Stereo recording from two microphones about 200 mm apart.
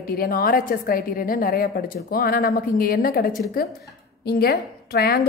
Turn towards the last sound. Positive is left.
turn(degrees=50)  # may be behind; listen again after turning